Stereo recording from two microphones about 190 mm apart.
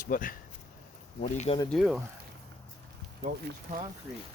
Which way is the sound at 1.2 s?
35° left (ahead or behind).